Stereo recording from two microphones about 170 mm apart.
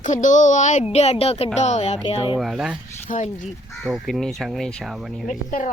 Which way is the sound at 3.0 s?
45° left (ahead or behind).